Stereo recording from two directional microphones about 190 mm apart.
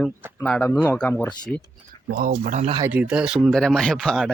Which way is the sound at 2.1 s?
50° right (ahead or behind).